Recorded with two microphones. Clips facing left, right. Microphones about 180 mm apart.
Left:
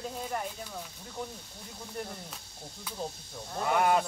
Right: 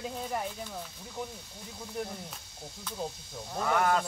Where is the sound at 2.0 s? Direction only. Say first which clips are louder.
Right 2 dB; centre (ahead or behind).